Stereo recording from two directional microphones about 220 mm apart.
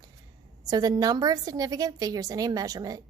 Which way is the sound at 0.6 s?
15° right (ahead or behind).